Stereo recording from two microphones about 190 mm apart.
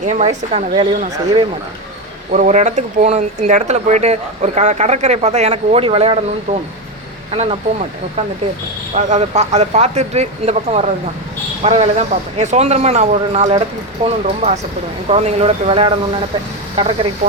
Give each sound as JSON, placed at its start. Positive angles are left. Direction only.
{"t": 0.0, "sound": "speech", "side_deg": -35}
{"t": 0.8, "sound": "speech", "side_deg": -25}
{"t": 2.3, "sound": "speech", "side_deg": -40}
{"t": 9.0, "sound": "speech", "side_deg": -40}
{"t": 14.0, "sound": "speech", "side_deg": -25}